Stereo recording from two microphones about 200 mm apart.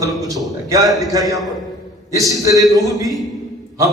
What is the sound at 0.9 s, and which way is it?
Speech, centre (ahead or behind).